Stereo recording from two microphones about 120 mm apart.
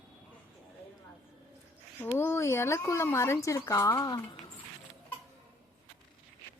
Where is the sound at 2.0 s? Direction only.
20° left (ahead or behind).